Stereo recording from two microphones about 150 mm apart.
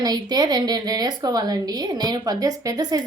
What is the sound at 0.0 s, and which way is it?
Speech, 25° right (ahead or behind).